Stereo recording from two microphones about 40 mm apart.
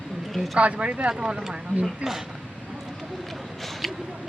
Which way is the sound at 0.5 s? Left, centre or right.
Right.